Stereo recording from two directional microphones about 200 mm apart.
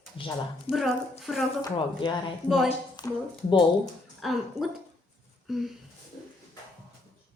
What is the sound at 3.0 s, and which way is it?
Speech, 20° left (ahead or behind).